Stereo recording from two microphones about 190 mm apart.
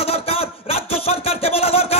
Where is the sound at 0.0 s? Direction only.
30° left (ahead or behind).